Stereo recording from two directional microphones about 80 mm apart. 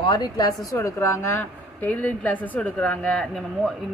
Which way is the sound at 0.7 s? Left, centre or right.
Left.